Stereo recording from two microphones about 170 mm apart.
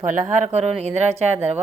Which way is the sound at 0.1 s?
45° right (ahead or behind).